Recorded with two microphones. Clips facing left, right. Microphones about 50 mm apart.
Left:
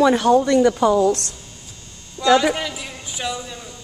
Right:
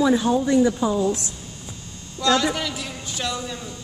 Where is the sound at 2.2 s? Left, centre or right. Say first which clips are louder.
Left 4 dB; centre.